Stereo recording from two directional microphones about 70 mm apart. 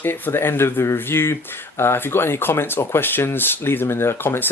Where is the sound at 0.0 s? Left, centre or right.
Left.